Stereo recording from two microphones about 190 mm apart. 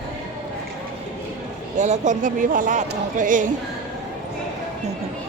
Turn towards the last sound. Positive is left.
turn(degrees=-45)  # may be behind; listen again after turning